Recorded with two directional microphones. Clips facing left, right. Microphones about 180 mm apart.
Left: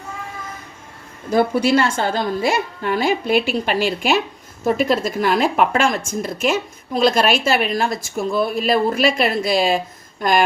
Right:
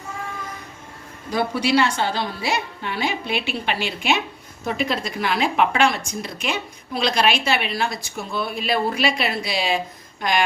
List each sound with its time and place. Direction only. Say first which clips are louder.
1.3 s a woman's voice: left 5 dB; 50° left (ahead or behind)